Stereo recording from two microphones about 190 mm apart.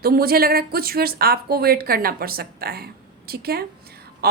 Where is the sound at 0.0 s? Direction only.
50° right (ahead or behind).